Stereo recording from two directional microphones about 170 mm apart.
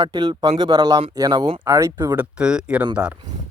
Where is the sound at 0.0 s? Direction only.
25° right (ahead or behind).